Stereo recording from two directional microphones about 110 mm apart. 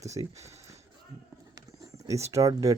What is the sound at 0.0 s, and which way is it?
Speech, 30° right (ahead or behind).